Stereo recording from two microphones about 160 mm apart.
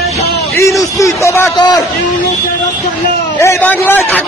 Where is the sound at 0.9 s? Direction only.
20° left (ahead or behind).